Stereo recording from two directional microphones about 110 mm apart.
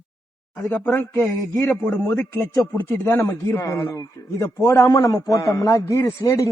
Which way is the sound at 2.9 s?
20° left (ahead or behind).